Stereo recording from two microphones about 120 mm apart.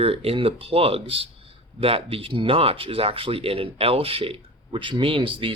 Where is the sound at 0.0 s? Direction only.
55° right (ahead or behind).